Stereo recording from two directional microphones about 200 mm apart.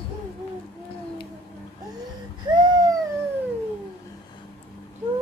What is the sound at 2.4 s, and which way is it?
Baby cry, 20° right (ahead or behind).